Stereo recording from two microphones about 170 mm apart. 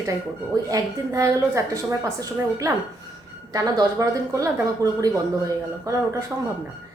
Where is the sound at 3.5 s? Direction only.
20° right (ahead or behind).